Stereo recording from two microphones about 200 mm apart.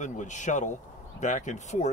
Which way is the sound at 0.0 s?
40° left (ahead or behind).